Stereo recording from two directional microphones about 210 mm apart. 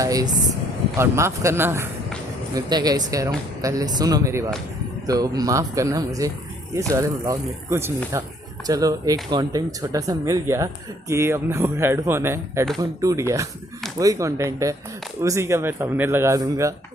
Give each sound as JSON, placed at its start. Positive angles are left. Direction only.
{"t": 0.0, "sound": "speech", "side_deg": -15}